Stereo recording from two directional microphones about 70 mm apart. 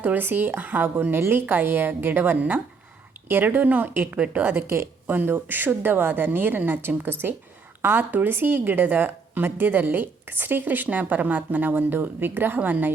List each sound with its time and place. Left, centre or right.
0.0 s speech: right